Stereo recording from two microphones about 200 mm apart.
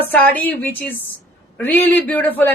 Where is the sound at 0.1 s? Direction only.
5° left (ahead or behind).